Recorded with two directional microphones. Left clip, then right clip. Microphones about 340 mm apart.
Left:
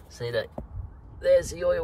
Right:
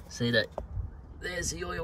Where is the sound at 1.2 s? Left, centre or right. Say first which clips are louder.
Left 14 dB; centre.